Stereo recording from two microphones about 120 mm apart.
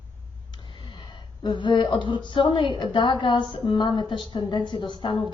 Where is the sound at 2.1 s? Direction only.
40° left (ahead or behind).